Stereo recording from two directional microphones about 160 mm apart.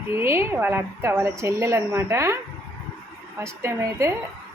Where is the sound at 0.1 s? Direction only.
15° right (ahead or behind).